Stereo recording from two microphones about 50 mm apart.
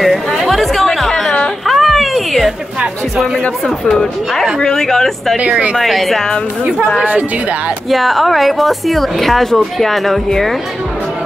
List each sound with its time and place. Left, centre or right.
0.0 s chatter: centre
1.7 s cat: centre
3.6 s a woman's voice: centre
7.9 s a woman's voice: centre